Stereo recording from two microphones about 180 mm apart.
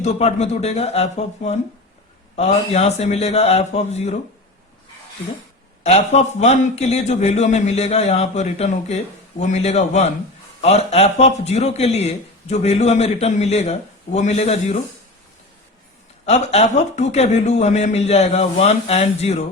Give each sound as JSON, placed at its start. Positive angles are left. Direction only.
{"t": 0.0, "sound": "a man's voice", "side_deg": 35}
{"t": 6.4, "sound": "a man's voice", "side_deg": 35}
{"t": 16.2, "sound": "a man's voice", "side_deg": 35}